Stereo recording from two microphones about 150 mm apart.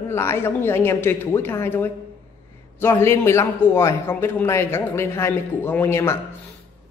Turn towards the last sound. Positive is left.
turn(degrees=20)  # may be behind; listen again after turning